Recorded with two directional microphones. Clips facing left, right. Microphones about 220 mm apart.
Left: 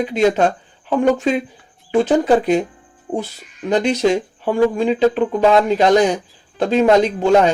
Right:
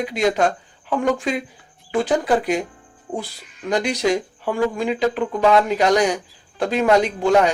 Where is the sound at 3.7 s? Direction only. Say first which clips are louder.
Left 4 dB; 25° left (ahead or behind).